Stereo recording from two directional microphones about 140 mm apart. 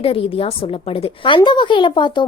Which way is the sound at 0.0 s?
40° left (ahead or behind).